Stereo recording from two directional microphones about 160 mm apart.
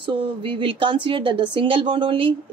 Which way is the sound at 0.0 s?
30° right (ahead or behind).